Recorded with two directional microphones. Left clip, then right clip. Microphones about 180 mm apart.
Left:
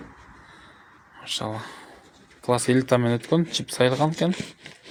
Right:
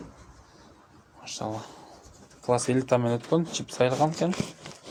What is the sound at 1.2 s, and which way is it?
Speech, 25° left (ahead or behind).